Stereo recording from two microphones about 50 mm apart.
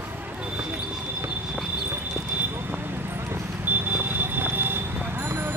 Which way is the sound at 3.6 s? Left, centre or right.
Right.